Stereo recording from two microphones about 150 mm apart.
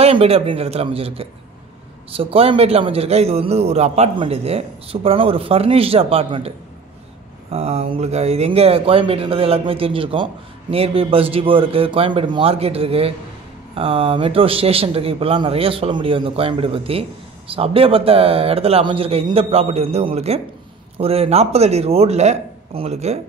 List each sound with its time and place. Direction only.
0.0 s speech: 40° right (ahead or behind)
7.5 s speech: 45° right (ahead or behind)